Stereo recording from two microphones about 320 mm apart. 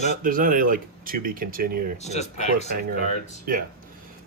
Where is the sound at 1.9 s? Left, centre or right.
Left.